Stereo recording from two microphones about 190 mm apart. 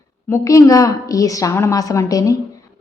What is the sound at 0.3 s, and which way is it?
A woman's voice, 15° left (ahead or behind).